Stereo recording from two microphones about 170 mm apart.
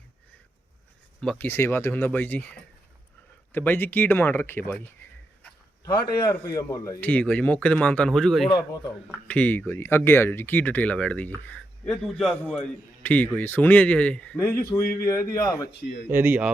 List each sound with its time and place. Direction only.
1.2 s speech: 5° left (ahead or behind)
6.2 s speech: 20° left (ahead or behind); by 8.4 s centre (ahead or behind)
8.4 s a man's voice: 25° left (ahead or behind)
9.2 s a man's voice: 10° left (ahead or behind)
16.0 s speech: 10° right (ahead or behind)